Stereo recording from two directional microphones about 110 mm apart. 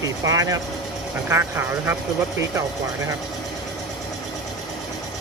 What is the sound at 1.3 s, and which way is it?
Speech, 20° right (ahead or behind).